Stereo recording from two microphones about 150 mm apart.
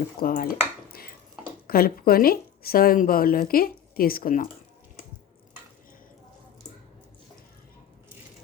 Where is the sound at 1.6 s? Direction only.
85° left; by 4.4 s 70° left (ahead or behind).